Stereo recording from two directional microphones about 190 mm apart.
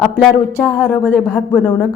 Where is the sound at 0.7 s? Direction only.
5° left (ahead or behind).